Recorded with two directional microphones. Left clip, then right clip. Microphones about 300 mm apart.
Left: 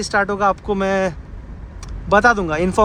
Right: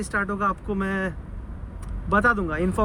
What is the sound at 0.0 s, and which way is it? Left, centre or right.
Speech, centre.